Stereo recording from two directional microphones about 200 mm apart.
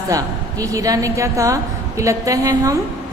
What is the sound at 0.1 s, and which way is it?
A woman's voice, 15° right (ahead or behind).